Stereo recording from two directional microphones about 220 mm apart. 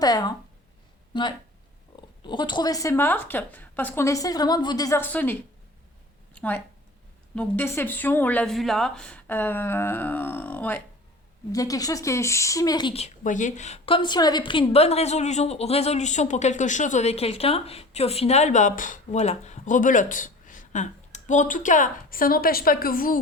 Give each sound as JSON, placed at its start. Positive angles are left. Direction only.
{"t": 0.0, "sound": "a woman's voice", "side_deg": 20}
{"t": 6.3, "sound": "a sound", "side_deg": 5}
{"t": 7.3, "sound": "a woman's voice", "side_deg": 10}